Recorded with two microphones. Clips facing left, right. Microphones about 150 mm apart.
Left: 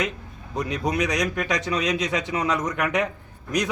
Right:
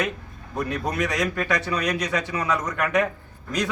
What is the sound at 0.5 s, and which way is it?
A man's voice, 20° left (ahead or behind).